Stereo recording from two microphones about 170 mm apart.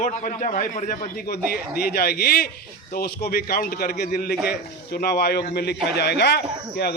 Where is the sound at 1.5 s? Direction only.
65° left (ahead or behind).